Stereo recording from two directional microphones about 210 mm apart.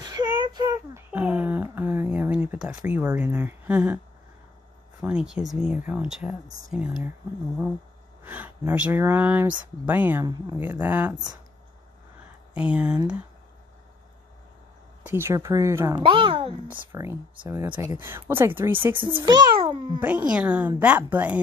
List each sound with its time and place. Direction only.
0.0 s a sound: 15° right (ahead or behind)
1.1 s a sound: 5° right (ahead or behind)
2.9 s speech: 5° right (ahead or behind)
5.0 s speech: 5° right (ahead or behind)
8.2 s speech: 10° right (ahead or behind)
10.6 s speech: 10° right (ahead or behind)
12.5 s speech: 5° right (ahead or behind)
15.0 s speech: 10° right (ahead or behind)
16.0 s speech: 25° right (ahead or behind)
16.6 s speech: 10° right (ahead or behind)
19.0 s a child's voice: 20° right (ahead or behind)
20.0 s speech: 5° right (ahead or behind)